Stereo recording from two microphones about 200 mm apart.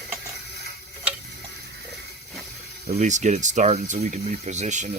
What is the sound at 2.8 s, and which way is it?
Speech, 35° right (ahead or behind).